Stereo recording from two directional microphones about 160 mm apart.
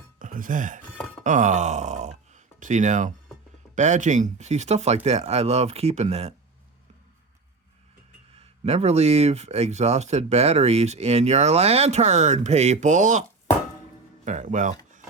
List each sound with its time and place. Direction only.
0.2 s speech: 55° right (ahead or behind)
8.4 s speech: 40° right (ahead or behind)
14.3 s speech: 50° right (ahead or behind)